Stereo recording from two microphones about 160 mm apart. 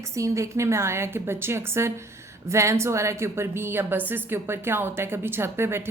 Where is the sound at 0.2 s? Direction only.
20° right (ahead or behind).